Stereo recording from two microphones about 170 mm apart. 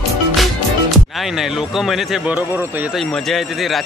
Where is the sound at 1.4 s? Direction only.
Centre (ahead or behind).